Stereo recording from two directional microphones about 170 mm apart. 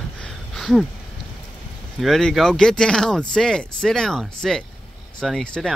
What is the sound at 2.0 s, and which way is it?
Speech, centre (ahead or behind).